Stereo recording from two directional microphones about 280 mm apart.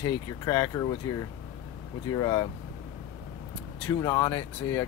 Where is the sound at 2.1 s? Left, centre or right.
Centre.